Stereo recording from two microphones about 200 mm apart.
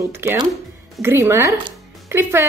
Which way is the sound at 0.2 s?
10° right (ahead or behind).